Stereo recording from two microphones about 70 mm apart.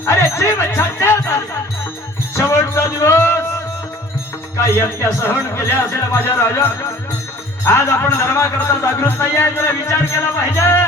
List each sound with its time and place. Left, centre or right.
0.0 s speech: left
4.5 s music: left
5.5 s speech: left
9.8 s music: left